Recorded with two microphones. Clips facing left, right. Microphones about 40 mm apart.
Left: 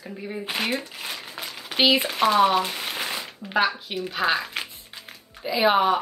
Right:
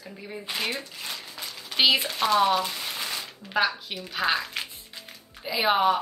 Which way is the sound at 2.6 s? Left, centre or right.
Left.